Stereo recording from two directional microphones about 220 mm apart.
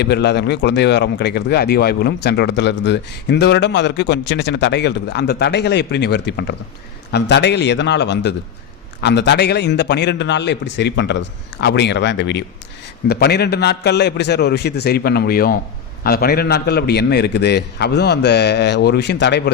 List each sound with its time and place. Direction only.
0.0 s speech: 50° left (ahead or behind)